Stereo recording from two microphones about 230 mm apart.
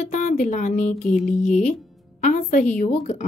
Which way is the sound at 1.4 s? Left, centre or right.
Left.